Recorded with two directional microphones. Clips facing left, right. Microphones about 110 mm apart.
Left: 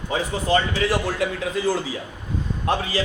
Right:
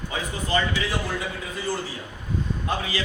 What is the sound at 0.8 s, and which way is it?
Speech, 75° left (ahead or behind).